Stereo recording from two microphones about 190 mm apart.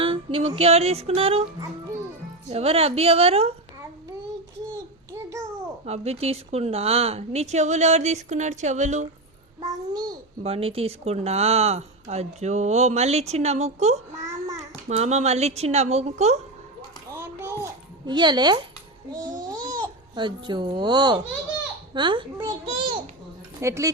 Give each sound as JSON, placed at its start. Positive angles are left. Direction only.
{"t": 0.0, "sound": "speech", "side_deg": -30}
{"t": 2.5, "sound": "speech", "side_deg": -30}
{"t": 4.7, "sound": "child singing", "side_deg": -15}
{"t": 5.8, "sound": "speech", "side_deg": -35}
{"t": 9.6, "sound": "a child's voice", "side_deg": -20}
{"t": 10.4, "sound": "speech", "side_deg": -30}
{"t": 17.2, "sound": "a child's voice", "side_deg": -15}